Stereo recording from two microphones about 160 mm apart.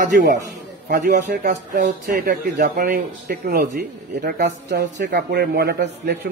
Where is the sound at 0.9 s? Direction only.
80° right.